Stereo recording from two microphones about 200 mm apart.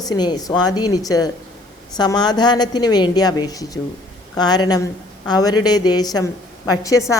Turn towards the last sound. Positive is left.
turn(degrees=15)  # may be behind; listen again after turning